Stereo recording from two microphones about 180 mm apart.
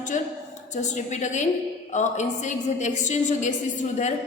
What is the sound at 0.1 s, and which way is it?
A woman's voice, 40° left (ahead or behind).